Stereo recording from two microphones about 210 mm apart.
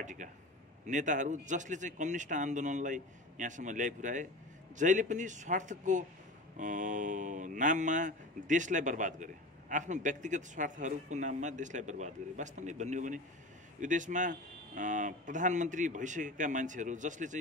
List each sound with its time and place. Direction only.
0.0 s a man's voice: 35° right (ahead or behind)